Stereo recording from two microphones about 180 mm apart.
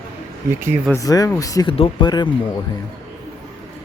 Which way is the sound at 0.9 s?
20° left (ahead or behind).